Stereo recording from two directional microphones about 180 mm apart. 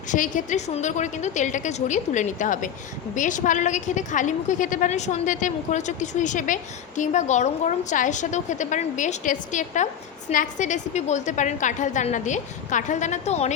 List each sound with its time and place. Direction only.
0.1 s a woman's voice: 45° left (ahead or behind)